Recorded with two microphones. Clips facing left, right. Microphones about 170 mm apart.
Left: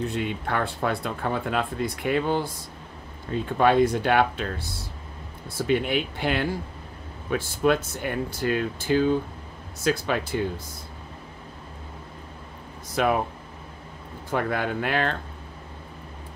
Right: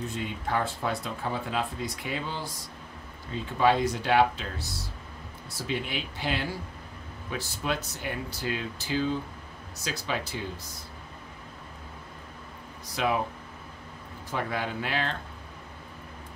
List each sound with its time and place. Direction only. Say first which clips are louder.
0.1 s speech: left 3 dB; 65° left (ahead or behind)
12.9 s speech: left 5 dB; 55° left (ahead or behind)
14.3 s speech: left 5 dB; 55° left (ahead or behind)